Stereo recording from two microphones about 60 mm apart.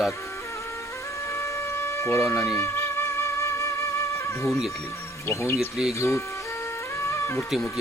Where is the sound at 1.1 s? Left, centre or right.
Left.